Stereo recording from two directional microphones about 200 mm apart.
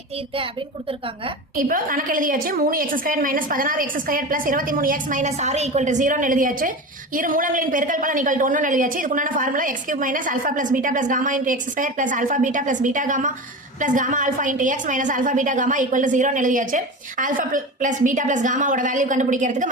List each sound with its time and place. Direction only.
1.5 s a woman's voice: 45° right (ahead or behind)